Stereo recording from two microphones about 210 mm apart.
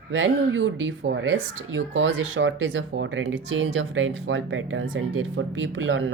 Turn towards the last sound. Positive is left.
turn(degrees=-65)  # may be behind; listen again after turning